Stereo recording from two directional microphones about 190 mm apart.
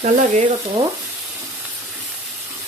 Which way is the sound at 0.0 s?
40° right (ahead or behind).